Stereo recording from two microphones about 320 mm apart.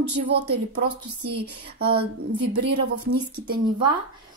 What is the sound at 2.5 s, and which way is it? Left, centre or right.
Speech, right.